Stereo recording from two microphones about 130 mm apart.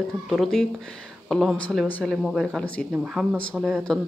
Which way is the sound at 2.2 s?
Centre (ahead or behind).